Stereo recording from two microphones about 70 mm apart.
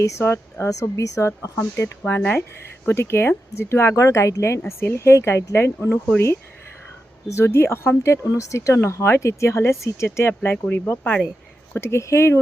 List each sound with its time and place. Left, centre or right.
0.0 s speech: left
2.0 s speech: left
7.3 s speech: left
11.7 s speech: left